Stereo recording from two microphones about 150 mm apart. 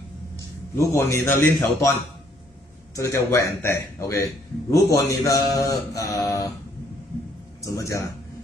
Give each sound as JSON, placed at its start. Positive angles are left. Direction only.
{"t": 0.7, "sound": "speech", "side_deg": 20}
{"t": 3.0, "sound": "speech", "side_deg": 20}
{"t": 7.6, "sound": "speech", "side_deg": 20}